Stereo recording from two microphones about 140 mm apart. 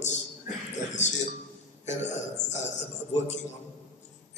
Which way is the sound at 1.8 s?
55° left (ahead or behind).